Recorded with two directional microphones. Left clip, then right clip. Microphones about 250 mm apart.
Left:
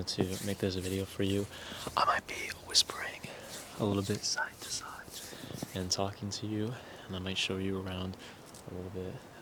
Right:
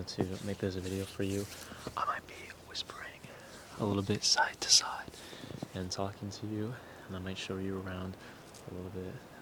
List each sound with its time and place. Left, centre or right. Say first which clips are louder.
0.0 s speech: left 3 dB; centre
1.8 s speech: left 6 dB; left
3.8 s speech: left 1 dB; centre
4.2 s speech: right 6 dB; right
5.7 s speech: left 4 dB; centre